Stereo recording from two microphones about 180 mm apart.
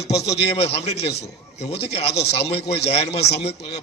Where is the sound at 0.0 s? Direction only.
35° left (ahead or behind).